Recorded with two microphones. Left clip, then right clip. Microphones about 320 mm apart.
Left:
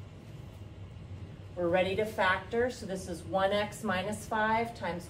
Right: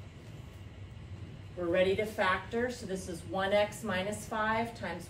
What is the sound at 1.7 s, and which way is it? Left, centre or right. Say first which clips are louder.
A woman's voice: right 1 dB; centre.